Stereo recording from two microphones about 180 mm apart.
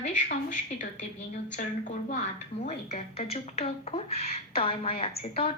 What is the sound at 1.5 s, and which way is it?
A woman's voice, 45° left (ahead or behind).